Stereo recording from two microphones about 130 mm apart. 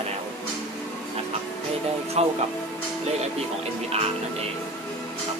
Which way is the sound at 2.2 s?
55° right (ahead or behind).